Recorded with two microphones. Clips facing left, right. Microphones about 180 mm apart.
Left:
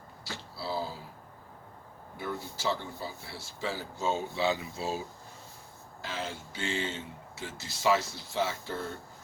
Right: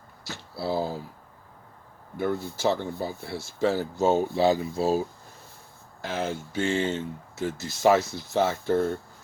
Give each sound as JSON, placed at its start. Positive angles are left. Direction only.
{"t": 0.5, "sound": "speech", "side_deg": -55}
{"t": 2.1, "sound": "speech", "side_deg": -55}
{"t": 4.4, "sound": "speech", "side_deg": -40}
{"t": 6.0, "sound": "speech", "side_deg": -50}